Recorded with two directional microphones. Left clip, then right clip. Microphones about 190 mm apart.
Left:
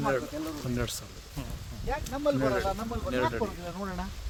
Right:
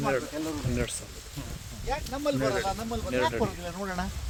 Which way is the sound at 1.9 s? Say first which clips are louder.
Left 1 dB; 55° right (ahead or behind).